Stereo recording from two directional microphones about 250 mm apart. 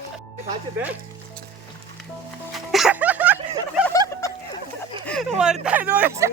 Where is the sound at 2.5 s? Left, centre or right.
Centre.